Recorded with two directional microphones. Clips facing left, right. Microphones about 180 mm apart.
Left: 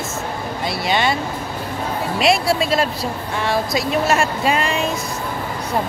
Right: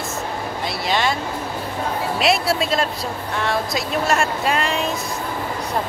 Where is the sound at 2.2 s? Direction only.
Centre (ahead or behind).